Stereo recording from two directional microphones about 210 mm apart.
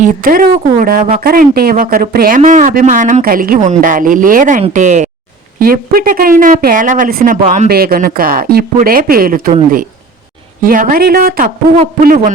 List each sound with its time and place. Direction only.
0.0 s speech: 40° right (ahead or behind)
10.6 s speech: 40° right (ahead or behind)